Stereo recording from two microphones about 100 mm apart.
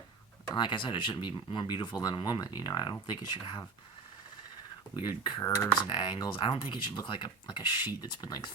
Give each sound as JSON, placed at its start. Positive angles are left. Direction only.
{"t": 0.5, "sound": "speech", "side_deg": 50}
{"t": 5.0, "sound": "speech", "side_deg": 50}
{"t": 5.4, "sound": "speech", "side_deg": 30}
{"t": 5.9, "sound": "speech", "side_deg": 45}